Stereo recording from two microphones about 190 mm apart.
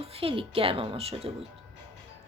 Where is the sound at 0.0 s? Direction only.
30° right (ahead or behind).